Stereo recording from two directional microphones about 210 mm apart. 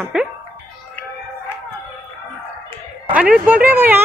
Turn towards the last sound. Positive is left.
turn(degrees=-10)  # may be behind; listen again after turning